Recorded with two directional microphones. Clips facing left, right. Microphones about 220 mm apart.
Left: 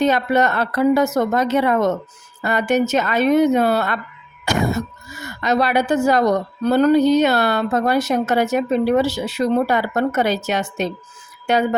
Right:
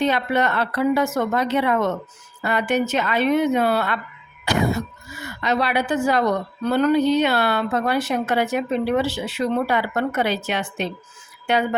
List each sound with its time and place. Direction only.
0.0 s a woman's voice: 45° left (ahead or behind)